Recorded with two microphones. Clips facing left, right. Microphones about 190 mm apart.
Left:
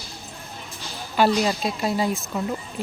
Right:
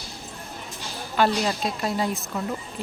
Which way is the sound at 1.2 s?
5° left (ahead or behind).